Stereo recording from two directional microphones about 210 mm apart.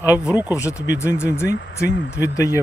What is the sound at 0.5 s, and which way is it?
Speech, 15° left (ahead or behind).